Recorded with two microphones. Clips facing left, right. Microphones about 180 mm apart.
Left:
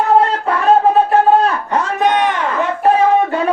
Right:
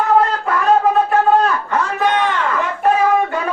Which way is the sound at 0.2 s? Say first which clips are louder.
Left 2 dB; 30° left (ahead or behind).